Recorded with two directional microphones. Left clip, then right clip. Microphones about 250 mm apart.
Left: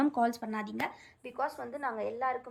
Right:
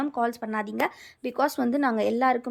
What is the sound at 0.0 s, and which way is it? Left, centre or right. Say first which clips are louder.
Speech: right 2 dB; centre.